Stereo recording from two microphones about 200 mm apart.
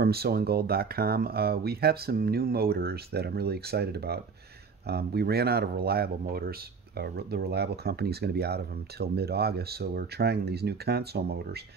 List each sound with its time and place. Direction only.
0.0 s speech: 50° right (ahead or behind)